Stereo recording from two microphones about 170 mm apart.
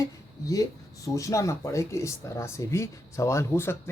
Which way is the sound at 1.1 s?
20° left (ahead or behind).